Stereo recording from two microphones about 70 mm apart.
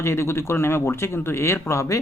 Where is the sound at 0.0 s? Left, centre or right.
Left.